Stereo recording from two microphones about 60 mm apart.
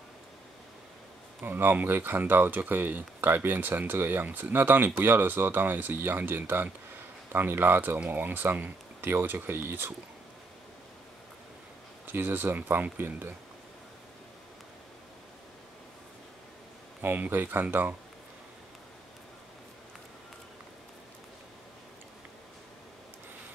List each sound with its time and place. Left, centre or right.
1.4 s speech: right
12.1 s speech: right
17.0 s speech: right